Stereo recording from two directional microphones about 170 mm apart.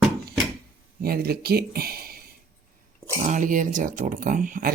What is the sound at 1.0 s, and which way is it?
Speech, 65° right (ahead or behind).